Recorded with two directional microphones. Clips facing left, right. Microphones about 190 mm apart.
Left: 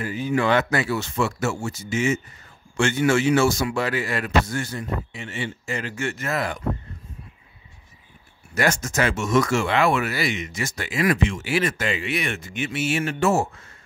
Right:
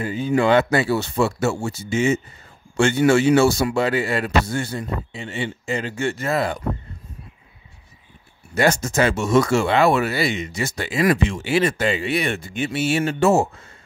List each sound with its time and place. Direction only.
0.0 s speech: 30° right (ahead or behind)
8.5 s speech: 30° right (ahead or behind)